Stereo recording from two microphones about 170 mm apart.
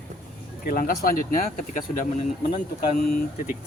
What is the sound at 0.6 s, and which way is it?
Speech, 60° left (ahead or behind).